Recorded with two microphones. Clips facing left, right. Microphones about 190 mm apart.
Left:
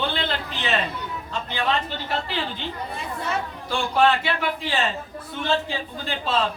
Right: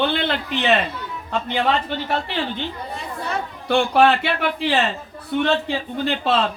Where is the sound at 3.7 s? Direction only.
65° right (ahead or behind).